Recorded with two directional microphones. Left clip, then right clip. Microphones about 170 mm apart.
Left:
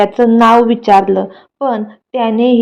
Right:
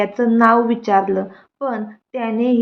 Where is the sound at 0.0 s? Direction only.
30° left (ahead or behind).